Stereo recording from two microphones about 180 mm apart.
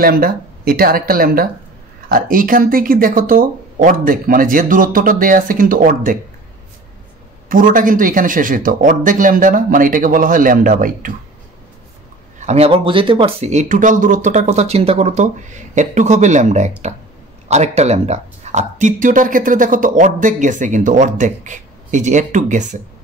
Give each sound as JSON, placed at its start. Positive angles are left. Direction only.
{"t": 0.0, "sound": "speech", "side_deg": -55}
{"t": 7.4, "sound": "speech", "side_deg": -50}
{"t": 12.4, "sound": "speech", "side_deg": -35}